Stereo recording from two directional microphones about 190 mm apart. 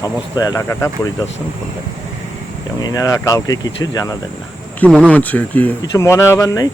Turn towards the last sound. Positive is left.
turn(degrees=20)  # may be behind; listen again after turning